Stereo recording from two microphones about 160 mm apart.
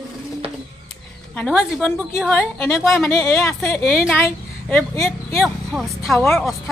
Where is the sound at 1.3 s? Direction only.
10° left (ahead or behind).